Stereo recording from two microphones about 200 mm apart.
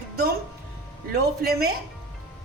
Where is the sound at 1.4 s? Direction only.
50° right (ahead or behind).